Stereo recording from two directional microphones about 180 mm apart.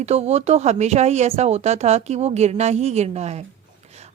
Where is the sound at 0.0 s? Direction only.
35° right (ahead or behind).